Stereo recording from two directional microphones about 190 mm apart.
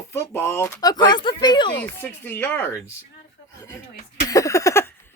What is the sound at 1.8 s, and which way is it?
Speech, 10° left (ahead or behind).